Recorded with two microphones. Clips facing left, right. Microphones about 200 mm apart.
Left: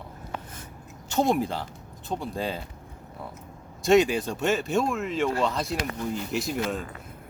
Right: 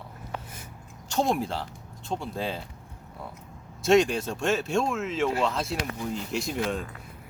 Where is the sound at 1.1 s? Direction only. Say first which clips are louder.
Left 2 dB; centre (ahead or behind).